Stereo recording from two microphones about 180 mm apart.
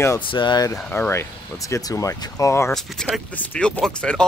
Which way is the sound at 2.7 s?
5° left (ahead or behind).